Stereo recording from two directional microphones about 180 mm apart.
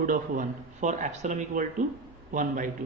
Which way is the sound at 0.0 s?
50° right (ahead or behind).